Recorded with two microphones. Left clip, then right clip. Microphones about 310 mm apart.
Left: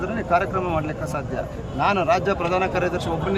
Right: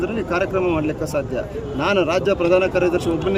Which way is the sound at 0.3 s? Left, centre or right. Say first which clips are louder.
Even; centre.